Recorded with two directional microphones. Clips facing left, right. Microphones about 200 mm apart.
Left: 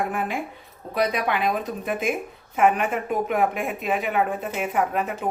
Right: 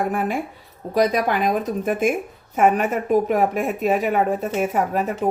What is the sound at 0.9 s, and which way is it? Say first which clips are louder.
A woman's voice: right 5 dB; 40° right (ahead or behind).